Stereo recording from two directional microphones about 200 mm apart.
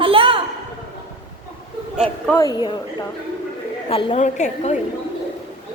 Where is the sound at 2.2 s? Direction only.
15° left (ahead or behind).